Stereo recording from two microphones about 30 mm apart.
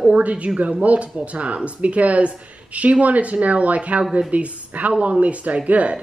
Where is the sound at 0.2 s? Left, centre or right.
Right.